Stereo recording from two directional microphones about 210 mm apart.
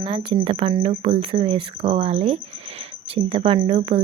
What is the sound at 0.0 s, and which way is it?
Speech, 25° right (ahead or behind).